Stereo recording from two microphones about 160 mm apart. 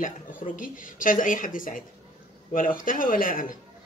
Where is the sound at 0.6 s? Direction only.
55° left (ahead or behind).